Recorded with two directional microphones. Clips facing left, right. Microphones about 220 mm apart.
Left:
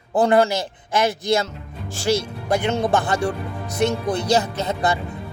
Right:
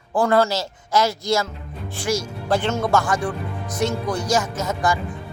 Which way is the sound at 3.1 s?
65° left (ahead or behind).